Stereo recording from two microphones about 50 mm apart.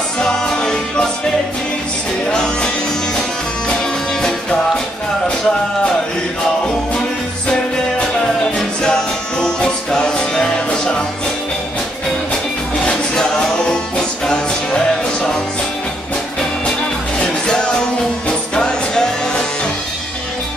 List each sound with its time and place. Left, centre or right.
0.2 s music: centre
2.2 s music: centre
8.8 s music: centre
12.8 s music: centre
17.2 s music: centre